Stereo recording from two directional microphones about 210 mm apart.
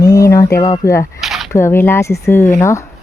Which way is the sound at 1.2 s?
Centre (ahead or behind).